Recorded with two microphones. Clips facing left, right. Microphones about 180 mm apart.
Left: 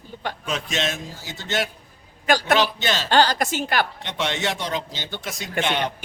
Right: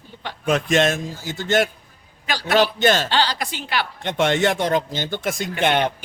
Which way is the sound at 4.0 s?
50° right (ahead or behind).